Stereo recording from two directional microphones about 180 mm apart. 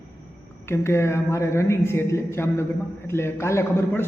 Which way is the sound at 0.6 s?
15° left (ahead or behind).